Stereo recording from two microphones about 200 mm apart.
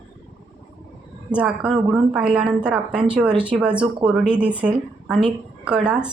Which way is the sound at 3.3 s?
25° right (ahead or behind).